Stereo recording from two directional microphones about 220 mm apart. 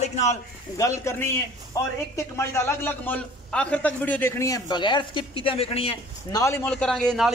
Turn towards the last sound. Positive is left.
turn(degrees=0)  # may be behind; listen again after turning